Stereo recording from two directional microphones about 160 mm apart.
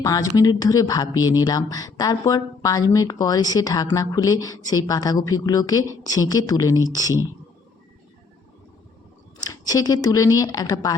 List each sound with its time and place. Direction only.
0.0 s speech: 20° left (ahead or behind)
9.4 s speech: 25° left (ahead or behind)